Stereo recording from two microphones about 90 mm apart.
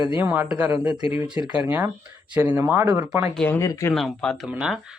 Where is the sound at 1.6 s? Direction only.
20° right (ahead or behind).